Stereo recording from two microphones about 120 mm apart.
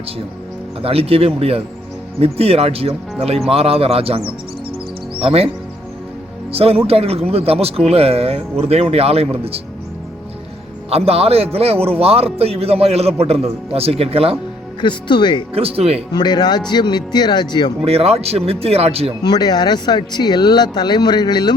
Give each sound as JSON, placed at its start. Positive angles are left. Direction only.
{"t": 0.8, "sound": "a man's voice", "side_deg": -55}
{"t": 5.2, "sound": "a man's voice", "side_deg": -55}
{"t": 6.5, "sound": "a man's voice", "side_deg": -55}
{"t": 10.8, "sound": "a man's voice", "side_deg": -55}
{"t": 14.8, "sound": "speech", "side_deg": 40}
{"t": 15.5, "sound": "a man's voice", "side_deg": -55}
{"t": 16.1, "sound": "speech", "side_deg": 35}
{"t": 17.8, "sound": "a man's voice", "side_deg": -55}
{"t": 19.2, "sound": "speech", "side_deg": 35}